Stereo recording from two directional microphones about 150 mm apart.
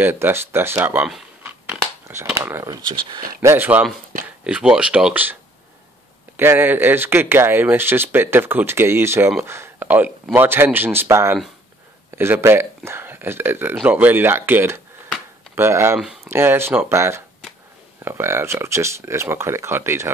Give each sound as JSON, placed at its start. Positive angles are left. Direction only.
{"t": 0.0, "sound": "speech", "side_deg": -15}
{"t": 1.4, "sound": "scissors", "side_deg": -15}
{"t": 3.3, "sound": "speech", "side_deg": -15}